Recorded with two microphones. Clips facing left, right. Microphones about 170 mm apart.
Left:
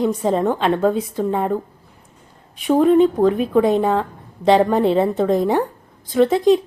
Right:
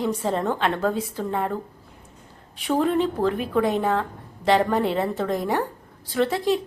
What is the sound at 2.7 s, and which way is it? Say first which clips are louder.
A woman's voice: left 8 dB; 15° left (ahead or behind).